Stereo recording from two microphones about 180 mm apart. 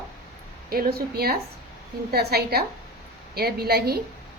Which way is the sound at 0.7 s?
60° right (ahead or behind).